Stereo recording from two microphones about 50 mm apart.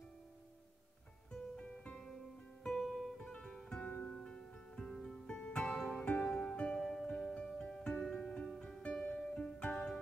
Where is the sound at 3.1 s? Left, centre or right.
Centre.